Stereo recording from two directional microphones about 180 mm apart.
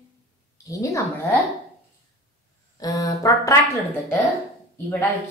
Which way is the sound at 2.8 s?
20° left (ahead or behind).